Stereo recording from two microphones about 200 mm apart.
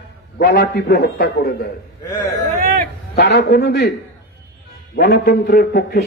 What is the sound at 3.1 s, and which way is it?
Speech, 55° left (ahead or behind).